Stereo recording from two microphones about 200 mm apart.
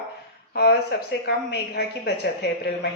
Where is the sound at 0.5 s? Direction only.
50° left (ahead or behind).